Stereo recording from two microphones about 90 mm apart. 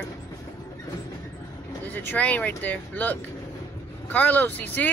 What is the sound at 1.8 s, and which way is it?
Speech, 20° left (ahead or behind).